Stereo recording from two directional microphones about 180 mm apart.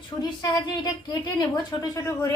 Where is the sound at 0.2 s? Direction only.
25° left (ahead or behind).